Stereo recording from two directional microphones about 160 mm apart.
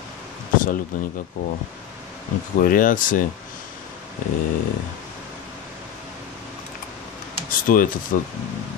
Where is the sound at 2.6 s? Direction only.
60° left (ahead or behind).